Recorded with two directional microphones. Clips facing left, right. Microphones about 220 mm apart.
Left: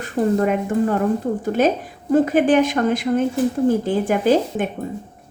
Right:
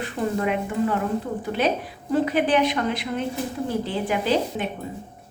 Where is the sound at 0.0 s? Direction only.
45° left (ahead or behind).